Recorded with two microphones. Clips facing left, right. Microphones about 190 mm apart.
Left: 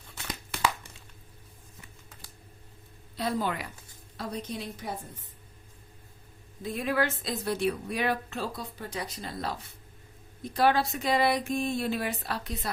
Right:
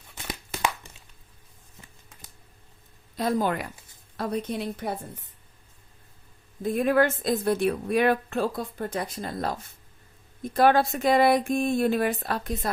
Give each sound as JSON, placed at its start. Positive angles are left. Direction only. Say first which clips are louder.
{"t": 0.2, "sound": "tearing", "louder": "right 1 dB", "side_deg": -20}
{"t": 3.2, "sound": "a woman's voice", "louder": "right 5 dB", "side_deg": -45}
{"t": 4.2, "sound": "a woman's voice", "louder": "right 7 dB", "side_deg": -60}
{"t": 6.6, "sound": "a woman's voice", "louder": "right 7 dB", "side_deg": -50}